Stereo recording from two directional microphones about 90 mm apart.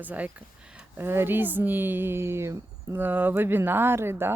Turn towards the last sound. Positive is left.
turn(degrees=-25)  # may be behind; listen again after turning